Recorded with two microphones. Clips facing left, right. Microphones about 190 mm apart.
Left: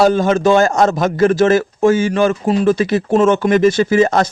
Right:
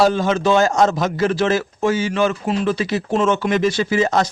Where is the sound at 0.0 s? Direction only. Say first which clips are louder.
Left 4 dB; 50° left (ahead or behind).